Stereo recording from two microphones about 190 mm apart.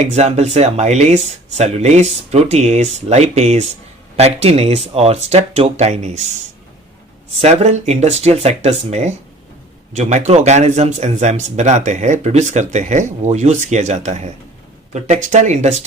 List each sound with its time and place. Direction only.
0.0 s speech: 35° right (ahead or behind)
7.4 s speech: 35° right (ahead or behind)